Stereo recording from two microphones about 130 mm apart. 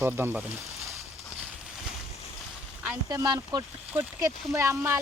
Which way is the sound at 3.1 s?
30° right (ahead or behind).